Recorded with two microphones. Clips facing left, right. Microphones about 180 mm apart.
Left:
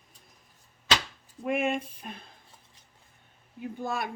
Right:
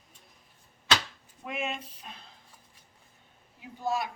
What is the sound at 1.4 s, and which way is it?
Speech, 55° left (ahead or behind).